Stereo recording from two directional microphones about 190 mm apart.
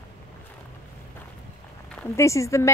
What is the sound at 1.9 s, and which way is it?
Speech, 10° left (ahead or behind).